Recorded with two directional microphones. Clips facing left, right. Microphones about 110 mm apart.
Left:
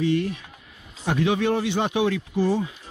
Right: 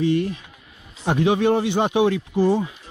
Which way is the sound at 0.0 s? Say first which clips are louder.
Right 2 dB; 25° right (ahead or behind).